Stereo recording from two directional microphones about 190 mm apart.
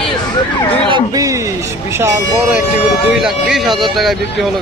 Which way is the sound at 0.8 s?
20° right (ahead or behind).